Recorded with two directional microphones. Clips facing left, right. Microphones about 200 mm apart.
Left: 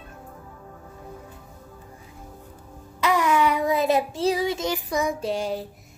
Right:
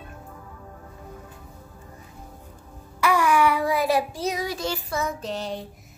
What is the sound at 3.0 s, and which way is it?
Child singing, 20° left (ahead or behind).